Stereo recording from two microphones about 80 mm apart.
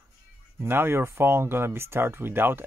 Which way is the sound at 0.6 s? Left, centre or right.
Right.